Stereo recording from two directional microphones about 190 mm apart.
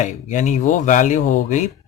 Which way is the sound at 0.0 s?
40° left (ahead or behind).